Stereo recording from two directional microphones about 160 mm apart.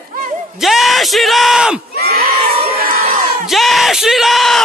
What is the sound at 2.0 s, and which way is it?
Crowd, 75° right (ahead or behind).